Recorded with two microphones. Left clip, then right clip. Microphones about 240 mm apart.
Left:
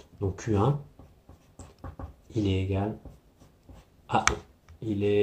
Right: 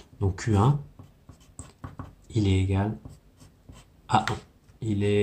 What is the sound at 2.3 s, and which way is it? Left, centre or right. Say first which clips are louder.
Speech: right 1 dB; right.